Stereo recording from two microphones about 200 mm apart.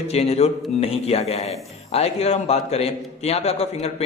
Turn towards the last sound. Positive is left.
turn(degrees=30)  # may be behind; listen again after turning